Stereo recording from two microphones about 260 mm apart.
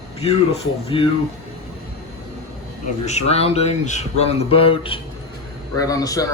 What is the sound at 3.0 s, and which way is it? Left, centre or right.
Speech, left.